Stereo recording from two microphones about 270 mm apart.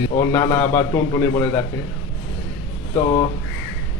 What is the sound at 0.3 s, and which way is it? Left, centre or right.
A man's voice, centre.